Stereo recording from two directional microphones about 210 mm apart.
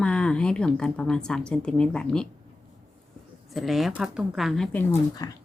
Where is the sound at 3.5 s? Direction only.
Centre (ahead or behind).